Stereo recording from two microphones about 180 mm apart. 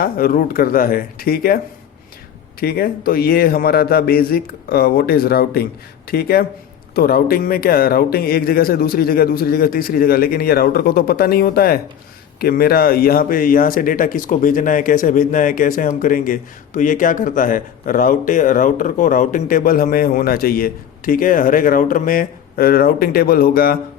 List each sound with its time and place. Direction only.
0.0 s speech: 50° left (ahead or behind)